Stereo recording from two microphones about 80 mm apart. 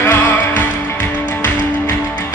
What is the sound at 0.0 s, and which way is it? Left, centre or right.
Music, left.